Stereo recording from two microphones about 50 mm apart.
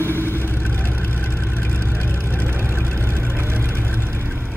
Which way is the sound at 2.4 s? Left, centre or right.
Right.